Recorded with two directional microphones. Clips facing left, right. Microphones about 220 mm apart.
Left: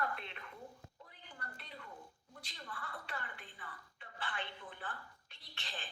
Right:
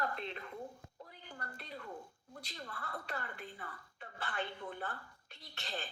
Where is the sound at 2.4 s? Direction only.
40° right (ahead or behind).